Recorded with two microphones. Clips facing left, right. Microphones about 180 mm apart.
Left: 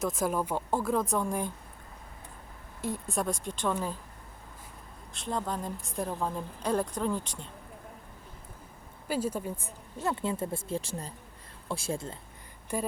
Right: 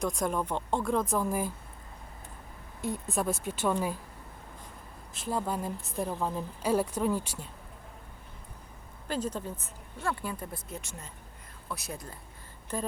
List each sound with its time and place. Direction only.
0.0 s a woman's voice: 5° left (ahead or behind)
2.8 s a woman's voice: centre (ahead or behind)
5.1 s a woman's voice: 5° right (ahead or behind)
9.0 s speech: 10° left (ahead or behind); by 12.1 s 25° left (ahead or behind)
12.7 s speech: 10° left (ahead or behind)